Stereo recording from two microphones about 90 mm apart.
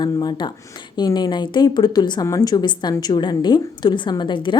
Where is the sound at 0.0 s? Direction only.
50° left (ahead or behind).